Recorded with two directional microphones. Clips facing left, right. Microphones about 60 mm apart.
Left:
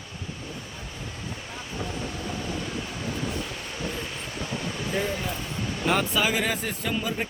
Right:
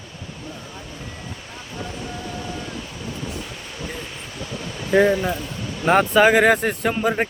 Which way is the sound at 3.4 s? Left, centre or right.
Centre.